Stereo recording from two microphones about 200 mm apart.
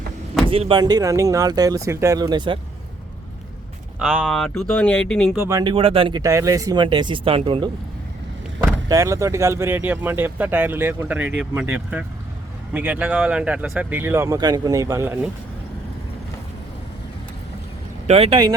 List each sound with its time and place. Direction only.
0.4 s speech: 25° right (ahead or behind)
4.0 s speech: 5° right (ahead or behind)
5.4 s speech: 15° right (ahead or behind)
8.9 s speech: 15° right (ahead or behind)
18.0 s speech: 30° right (ahead or behind)